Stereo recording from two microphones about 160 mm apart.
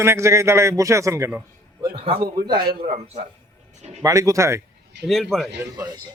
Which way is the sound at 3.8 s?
40° right (ahead or behind).